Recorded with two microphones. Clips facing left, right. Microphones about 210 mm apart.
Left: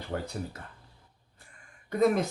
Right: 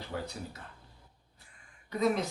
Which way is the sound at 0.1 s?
50° left (ahead or behind).